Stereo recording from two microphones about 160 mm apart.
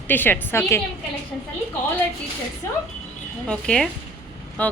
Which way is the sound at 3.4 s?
5° left (ahead or behind).